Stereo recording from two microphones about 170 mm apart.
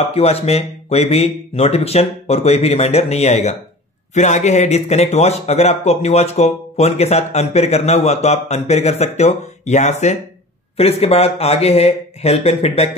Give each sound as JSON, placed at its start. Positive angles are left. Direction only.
{"t": 0.0, "sound": "speech", "side_deg": 35}